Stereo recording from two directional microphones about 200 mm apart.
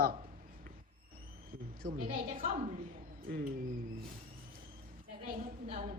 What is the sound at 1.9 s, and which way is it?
Speech, 45° right (ahead or behind).